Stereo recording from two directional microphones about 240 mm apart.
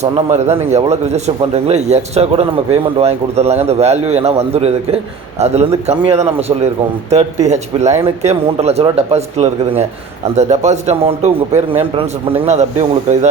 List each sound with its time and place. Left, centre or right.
0.0 s speech: right